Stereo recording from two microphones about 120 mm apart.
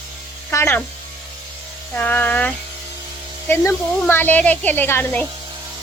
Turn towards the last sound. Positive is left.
turn(degrees=15)  # may be behind; listen again after turning